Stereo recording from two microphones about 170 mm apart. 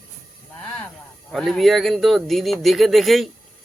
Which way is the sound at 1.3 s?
Centre (ahead or behind).